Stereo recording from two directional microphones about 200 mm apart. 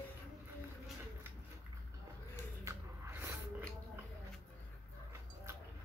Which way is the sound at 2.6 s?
10° right (ahead or behind).